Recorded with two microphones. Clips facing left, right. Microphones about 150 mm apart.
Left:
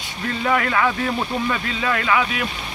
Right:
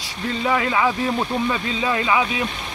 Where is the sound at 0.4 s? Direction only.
15° right (ahead or behind).